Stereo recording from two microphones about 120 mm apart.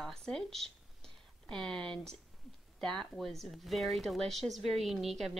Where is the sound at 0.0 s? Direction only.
5° left (ahead or behind).